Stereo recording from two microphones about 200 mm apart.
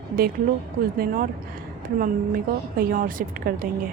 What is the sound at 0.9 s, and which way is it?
A woman's voice, 45° right (ahead or behind).